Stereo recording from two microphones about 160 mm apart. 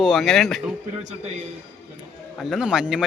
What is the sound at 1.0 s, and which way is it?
Speech, 45° right (ahead or behind).